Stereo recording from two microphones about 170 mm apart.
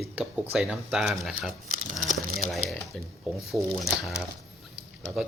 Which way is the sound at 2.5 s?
Centre (ahead or behind).